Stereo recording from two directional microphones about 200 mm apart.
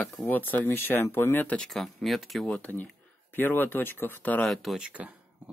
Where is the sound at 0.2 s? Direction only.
10° left (ahead or behind).